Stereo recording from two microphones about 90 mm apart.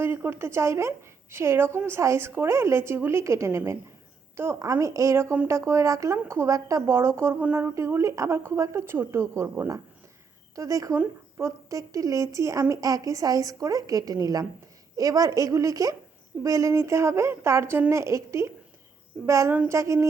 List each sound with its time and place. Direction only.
0.0 s a woman's voice: 25° right (ahead or behind)
7.8 s a woman's voice: 30° right (ahead or behind)
10.9 s a woman's voice: 25° right (ahead or behind)